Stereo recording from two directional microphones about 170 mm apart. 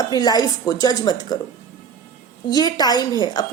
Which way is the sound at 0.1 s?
25° left (ahead or behind).